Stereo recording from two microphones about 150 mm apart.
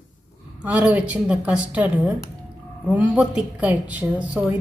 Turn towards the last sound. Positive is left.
turn(degrees=-10)  # may be behind; listen again after turning